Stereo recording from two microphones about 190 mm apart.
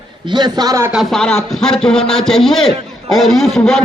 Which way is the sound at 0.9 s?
Centre (ahead or behind).